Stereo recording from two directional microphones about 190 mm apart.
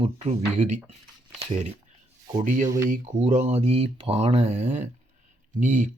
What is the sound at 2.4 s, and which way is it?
Speech, 40° right (ahead or behind).